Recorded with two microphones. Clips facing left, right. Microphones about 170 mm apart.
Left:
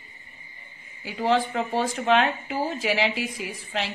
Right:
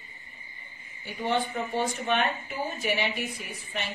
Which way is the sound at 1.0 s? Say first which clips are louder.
Left 5 dB; 90° left.